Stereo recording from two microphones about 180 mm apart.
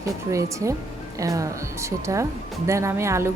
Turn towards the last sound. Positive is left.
turn(degrees=-15)  # may be behind; listen again after turning